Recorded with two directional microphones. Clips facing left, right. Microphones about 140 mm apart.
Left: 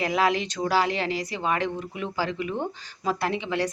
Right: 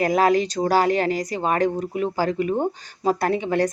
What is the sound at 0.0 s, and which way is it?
A woman's voice, 45° right (ahead or behind).